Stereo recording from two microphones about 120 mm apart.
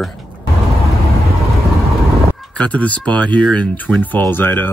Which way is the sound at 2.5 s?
10° left (ahead or behind).